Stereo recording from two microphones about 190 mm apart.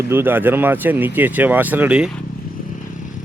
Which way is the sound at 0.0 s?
10° right (ahead or behind).